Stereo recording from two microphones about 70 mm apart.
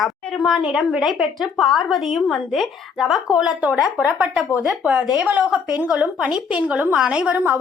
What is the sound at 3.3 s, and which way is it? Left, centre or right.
Speech, centre.